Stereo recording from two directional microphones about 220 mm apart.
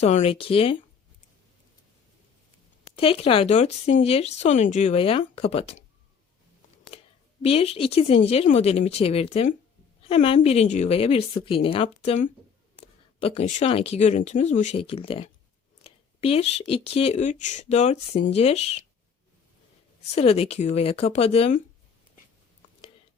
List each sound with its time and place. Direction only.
0.0 s speech: 30° left (ahead or behind)
2.8 s speech: 25° left (ahead or behind)
7.4 s speech: 25° left (ahead or behind)
20.1 s speech: 25° left (ahead or behind)